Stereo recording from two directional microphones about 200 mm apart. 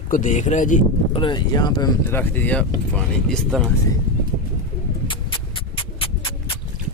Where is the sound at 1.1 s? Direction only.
20° left (ahead or behind).